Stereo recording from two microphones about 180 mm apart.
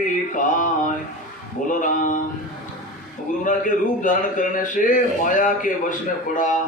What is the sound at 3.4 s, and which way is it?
Speech, 45° left (ahead or behind).